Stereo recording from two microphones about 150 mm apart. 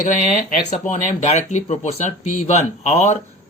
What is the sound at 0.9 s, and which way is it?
A man's voice, 50° left (ahead or behind).